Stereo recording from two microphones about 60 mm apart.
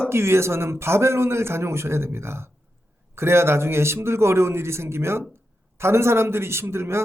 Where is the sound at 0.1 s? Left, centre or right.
Right.